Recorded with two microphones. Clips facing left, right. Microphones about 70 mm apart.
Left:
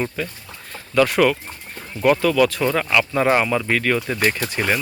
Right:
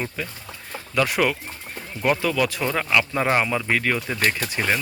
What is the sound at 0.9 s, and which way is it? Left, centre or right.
Speech, centre.